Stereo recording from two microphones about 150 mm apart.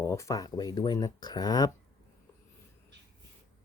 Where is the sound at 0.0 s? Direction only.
20° left (ahead or behind).